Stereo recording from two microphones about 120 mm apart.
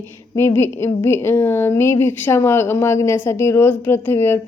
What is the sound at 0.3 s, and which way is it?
A woman's voice, 20° left (ahead or behind).